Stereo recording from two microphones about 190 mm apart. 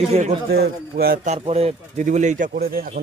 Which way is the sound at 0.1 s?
40° right (ahead or behind).